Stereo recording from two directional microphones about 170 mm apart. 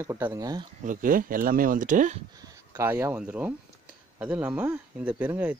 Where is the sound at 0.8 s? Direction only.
50° right (ahead or behind).